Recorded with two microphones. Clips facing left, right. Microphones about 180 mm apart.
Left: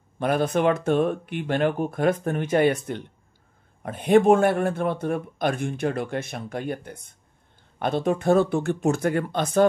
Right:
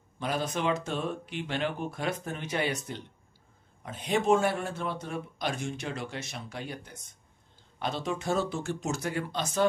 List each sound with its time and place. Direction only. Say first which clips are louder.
0.2 s speech: left 9 dB; 55° left (ahead or behind)